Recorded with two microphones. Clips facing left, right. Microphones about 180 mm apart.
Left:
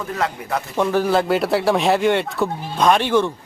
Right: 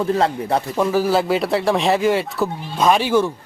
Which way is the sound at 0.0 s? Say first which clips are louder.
Right 6 dB; 30° right (ahead or behind).